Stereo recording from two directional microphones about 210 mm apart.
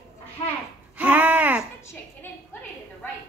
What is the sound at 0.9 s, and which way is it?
Speech, 5° right (ahead or behind).